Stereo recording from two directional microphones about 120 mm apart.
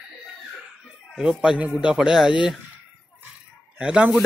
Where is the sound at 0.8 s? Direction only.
5° right (ahead or behind).